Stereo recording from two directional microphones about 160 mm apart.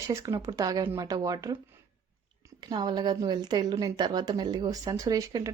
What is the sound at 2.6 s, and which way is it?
A woman's voice, 25° right (ahead or behind).